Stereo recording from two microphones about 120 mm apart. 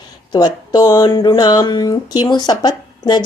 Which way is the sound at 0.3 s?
35° left (ahead or behind).